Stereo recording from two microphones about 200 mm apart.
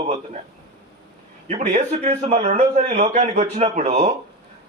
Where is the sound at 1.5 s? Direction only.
35° right (ahead or behind).